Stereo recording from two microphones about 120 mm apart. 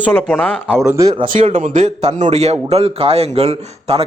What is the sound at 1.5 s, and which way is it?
A man's voice, 90° right.